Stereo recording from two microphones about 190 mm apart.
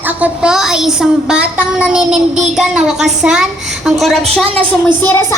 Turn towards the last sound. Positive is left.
turn(degrees=15)  # may be behind; listen again after turning